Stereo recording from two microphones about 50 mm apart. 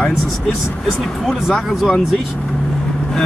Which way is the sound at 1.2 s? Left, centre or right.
Centre.